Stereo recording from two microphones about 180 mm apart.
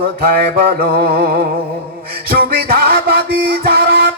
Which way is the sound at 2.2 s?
55° right (ahead or behind).